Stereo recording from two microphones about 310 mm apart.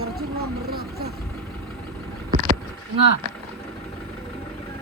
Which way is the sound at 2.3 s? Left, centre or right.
Right.